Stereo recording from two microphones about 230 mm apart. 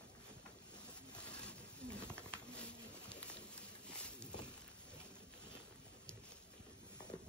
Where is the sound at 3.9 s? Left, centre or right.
Centre.